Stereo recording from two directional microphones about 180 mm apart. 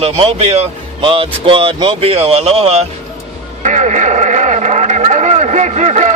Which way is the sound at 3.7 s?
45° right (ahead or behind).